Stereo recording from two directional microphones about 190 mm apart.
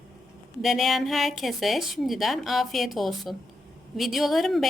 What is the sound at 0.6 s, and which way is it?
A woman's voice, centre (ahead or behind).